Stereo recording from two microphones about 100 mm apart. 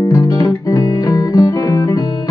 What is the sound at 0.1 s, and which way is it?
Music, 35° left (ahead or behind).